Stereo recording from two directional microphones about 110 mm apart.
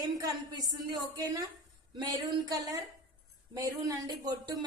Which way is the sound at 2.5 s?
35° right (ahead or behind).